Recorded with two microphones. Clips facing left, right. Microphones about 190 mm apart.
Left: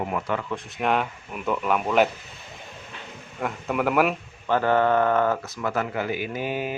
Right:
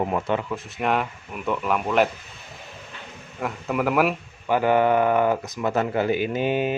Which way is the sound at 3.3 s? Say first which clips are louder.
Right 1 dB; centre (ahead or behind).